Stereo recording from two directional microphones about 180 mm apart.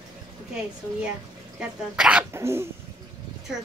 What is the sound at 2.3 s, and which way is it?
Speech, 15° right (ahead or behind).